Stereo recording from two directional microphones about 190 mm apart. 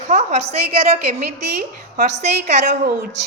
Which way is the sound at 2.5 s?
55° right (ahead or behind).